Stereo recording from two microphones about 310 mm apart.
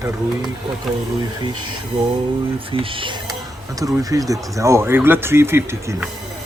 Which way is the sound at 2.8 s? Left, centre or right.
Centre.